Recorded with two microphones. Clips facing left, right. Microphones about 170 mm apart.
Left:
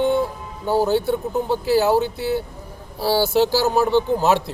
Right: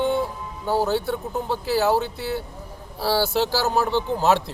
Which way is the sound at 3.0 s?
20° left (ahead or behind).